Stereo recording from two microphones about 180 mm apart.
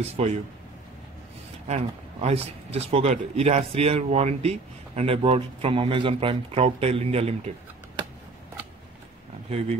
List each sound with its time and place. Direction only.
0.0 s speech: 35° right (ahead or behind)
1.7 s speech: 35° right (ahead or behind)